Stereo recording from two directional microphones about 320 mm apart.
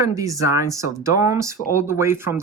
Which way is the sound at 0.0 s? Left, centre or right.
Centre.